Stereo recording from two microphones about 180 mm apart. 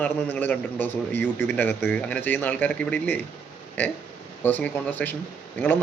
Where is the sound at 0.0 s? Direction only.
10° left (ahead or behind).